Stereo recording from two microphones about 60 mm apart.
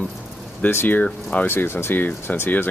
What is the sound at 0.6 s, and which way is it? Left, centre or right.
Speech, left.